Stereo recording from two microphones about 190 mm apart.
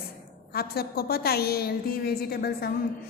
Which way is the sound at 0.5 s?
55° left (ahead or behind).